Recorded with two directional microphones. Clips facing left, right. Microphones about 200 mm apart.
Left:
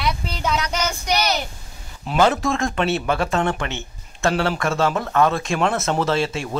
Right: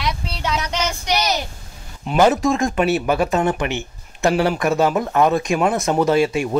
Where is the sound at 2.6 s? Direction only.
15° right (ahead or behind).